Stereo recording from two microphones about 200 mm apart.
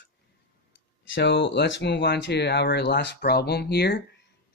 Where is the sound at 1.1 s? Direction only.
60° left (ahead or behind).